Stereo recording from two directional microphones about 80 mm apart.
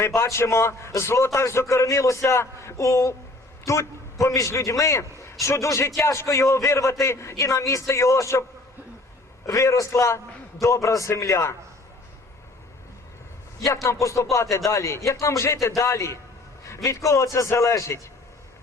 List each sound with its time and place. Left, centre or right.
0.2 s a man's voice: left
9.5 s a man's voice: left
13.8 s a man's voice: left